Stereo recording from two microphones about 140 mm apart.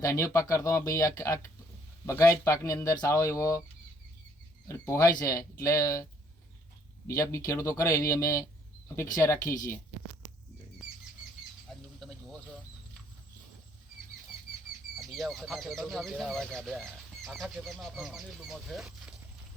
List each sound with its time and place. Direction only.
0.0 s speech: 20° left (ahead or behind)
4.7 s speech: 20° left (ahead or behind)
7.1 s speech: 20° left (ahead or behind)
11.7 s rodents: 5° left (ahead or behind)
14.9 s speech: centre (ahead or behind)